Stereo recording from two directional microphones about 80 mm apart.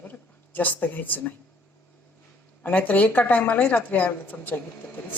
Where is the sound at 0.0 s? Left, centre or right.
Left.